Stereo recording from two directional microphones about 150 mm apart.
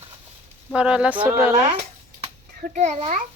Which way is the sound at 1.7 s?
45° right (ahead or behind).